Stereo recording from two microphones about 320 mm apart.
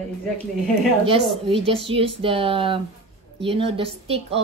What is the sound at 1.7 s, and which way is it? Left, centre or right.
A woman's voice, centre.